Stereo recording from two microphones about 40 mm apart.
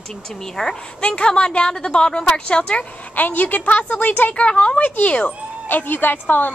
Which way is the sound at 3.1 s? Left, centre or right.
Left.